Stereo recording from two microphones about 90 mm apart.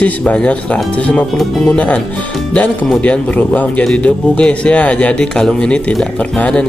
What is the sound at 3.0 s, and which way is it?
A man's voice, 15° left (ahead or behind).